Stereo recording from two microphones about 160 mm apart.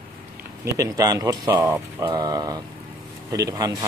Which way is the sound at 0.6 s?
20° right (ahead or behind).